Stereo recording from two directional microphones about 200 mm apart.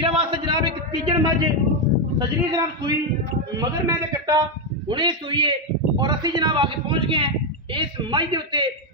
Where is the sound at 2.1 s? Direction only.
20° right (ahead or behind).